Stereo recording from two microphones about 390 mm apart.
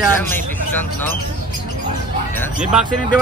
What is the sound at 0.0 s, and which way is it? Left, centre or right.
Speech, centre.